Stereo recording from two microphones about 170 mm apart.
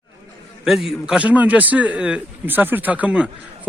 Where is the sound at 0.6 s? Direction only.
Centre (ahead or behind).